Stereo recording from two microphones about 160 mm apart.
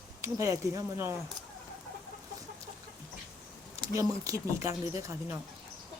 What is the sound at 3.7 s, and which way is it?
Speech, 20° right (ahead or behind).